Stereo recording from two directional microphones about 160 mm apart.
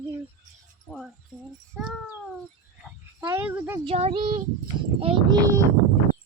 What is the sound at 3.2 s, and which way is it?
Speech, 20° right (ahead or behind).